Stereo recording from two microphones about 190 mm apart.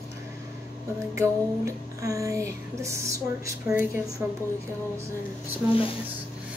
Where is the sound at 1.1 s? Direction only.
15° right (ahead or behind).